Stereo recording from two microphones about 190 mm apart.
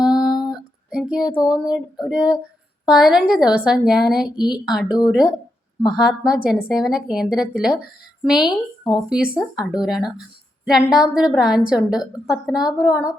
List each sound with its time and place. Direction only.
0.0 s a sound: 5° right (ahead or behind)
1.3 s speech: 20° left (ahead or behind)
1.5 s a woman's voice: 5° right (ahead or behind)
4.4 s speech: 20° left (ahead or behind)
4.6 s a woman's voice: centre (ahead or behind)